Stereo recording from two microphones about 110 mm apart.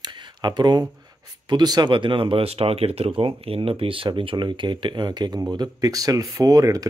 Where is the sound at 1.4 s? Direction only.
40° right (ahead or behind).